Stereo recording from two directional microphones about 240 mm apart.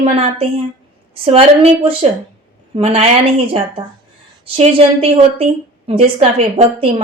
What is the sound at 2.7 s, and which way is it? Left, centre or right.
A woman's voice, right.